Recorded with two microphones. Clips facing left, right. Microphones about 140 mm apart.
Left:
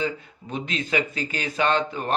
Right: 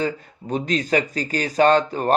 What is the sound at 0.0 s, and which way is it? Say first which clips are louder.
Speech: right 3 dB; 40° right (ahead or behind).